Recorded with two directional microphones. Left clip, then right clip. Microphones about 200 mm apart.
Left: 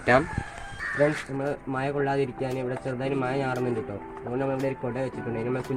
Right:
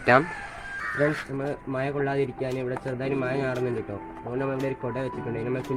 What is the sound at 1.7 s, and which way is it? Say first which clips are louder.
Speech: even; 15° left (ahead or behind).